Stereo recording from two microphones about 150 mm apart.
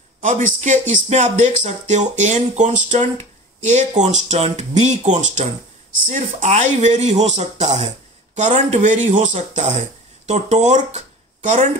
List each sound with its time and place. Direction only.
0.2 s speech: 60° right (ahead or behind)